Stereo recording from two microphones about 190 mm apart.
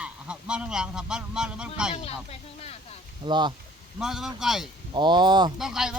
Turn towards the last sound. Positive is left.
turn(degrees=-5)  # may be behind; listen again after turning